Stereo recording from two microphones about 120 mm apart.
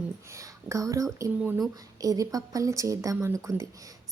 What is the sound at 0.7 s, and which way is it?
Speech, 25° right (ahead or behind).